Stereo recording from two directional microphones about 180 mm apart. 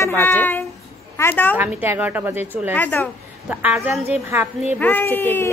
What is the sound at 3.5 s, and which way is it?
Speech, 10° right (ahead or behind).